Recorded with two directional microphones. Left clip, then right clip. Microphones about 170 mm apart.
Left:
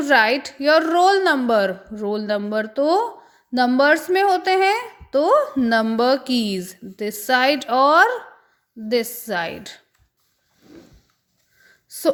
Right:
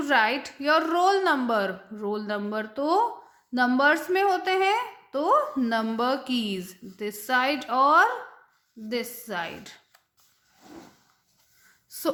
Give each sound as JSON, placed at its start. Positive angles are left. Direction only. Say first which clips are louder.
{"t": 0.0, "sound": "a woman's voice", "louder": "left 7 dB", "side_deg": 25}
{"t": 11.9, "sound": "gasp", "louder": "left 9 dB", "side_deg": 20}